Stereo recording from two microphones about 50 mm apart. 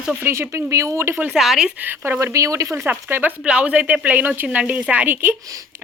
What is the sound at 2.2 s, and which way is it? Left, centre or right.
Speech, right.